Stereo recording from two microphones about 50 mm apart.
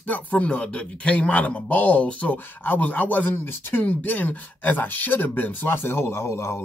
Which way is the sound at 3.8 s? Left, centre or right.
Left.